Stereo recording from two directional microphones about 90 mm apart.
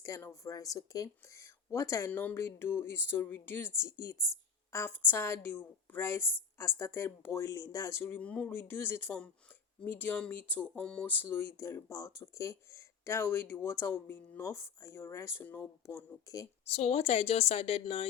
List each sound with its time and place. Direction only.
0.1 s speech: 40° left (ahead or behind)
2.0 s speech: 20° left (ahead or behind)
8.2 s speech: 15° left (ahead or behind)
8.5 s speech: 25° left (ahead or behind)
16.8 s speech: 90° left